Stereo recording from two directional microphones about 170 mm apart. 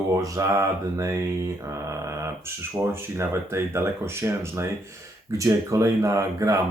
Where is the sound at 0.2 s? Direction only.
20° right (ahead or behind).